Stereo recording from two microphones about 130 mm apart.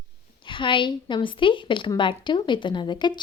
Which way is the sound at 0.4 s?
40° left (ahead or behind).